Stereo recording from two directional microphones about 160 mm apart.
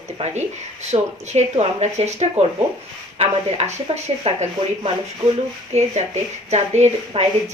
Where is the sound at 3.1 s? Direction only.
45° right (ahead or behind).